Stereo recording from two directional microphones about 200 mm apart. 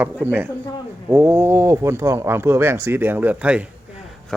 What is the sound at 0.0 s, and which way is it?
Speech, 10° right (ahead or behind).